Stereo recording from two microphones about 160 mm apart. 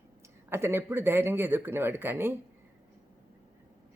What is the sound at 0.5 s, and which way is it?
Speech, 15° right (ahead or behind).